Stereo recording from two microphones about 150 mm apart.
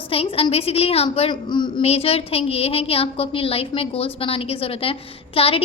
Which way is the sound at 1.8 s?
40° left (ahead or behind).